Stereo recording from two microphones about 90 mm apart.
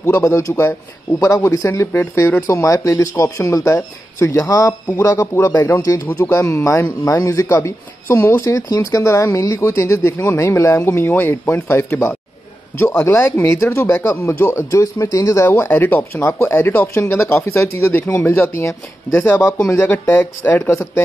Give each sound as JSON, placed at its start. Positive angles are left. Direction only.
{"t": 0.0, "sound": "speech", "side_deg": 35}
{"t": 15.4, "sound": "speech", "side_deg": 25}
{"t": 19.1, "sound": "speech", "side_deg": 20}
{"t": 20.7, "sound": "speech", "side_deg": 30}